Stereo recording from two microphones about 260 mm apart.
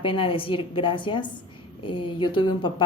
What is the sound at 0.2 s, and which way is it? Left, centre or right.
Speech, left.